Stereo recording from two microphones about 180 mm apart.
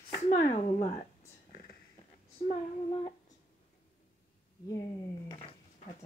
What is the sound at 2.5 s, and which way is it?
Female singing, 30° left (ahead or behind).